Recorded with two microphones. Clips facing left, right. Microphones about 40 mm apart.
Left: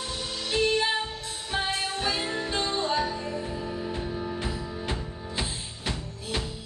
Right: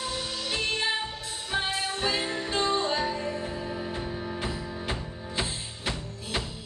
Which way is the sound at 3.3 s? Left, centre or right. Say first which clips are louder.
Even; centre.